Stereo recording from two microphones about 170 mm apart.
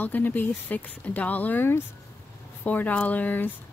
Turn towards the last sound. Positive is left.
turn(degrees=10)  # may be behind; listen again after turning